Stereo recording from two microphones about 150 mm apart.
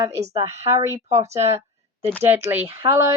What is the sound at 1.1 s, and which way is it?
Speech, 45° right (ahead or behind).